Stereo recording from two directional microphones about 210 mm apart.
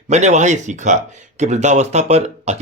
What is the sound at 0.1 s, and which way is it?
Speech, 35° right (ahead or behind).